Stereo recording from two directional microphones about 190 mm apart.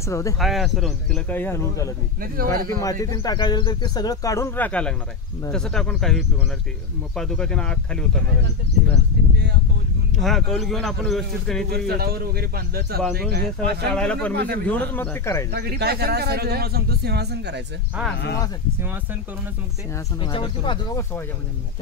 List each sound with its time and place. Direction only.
0.0 s speech: 15° left (ahead or behind)
0.4 s speech: centre (ahead or behind)
1.3 s speech: 10° left (ahead or behind)
2.3 s speech: 50° right (ahead or behind)
2.8 s speech: 15° left (ahead or behind)
10.2 s speech: centre (ahead or behind)
11.7 s speech: 55° right (ahead or behind)
13.9 s speech: 5° left (ahead or behind)
14.3 s speech: 60° right (ahead or behind)
14.7 s speech: 10° left (ahead or behind)
15.5 s speech: 55° right (ahead or behind)
20.2 s speech: 25° left (ahead or behind)